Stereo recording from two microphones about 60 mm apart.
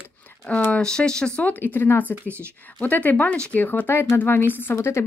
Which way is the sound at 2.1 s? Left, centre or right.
Right.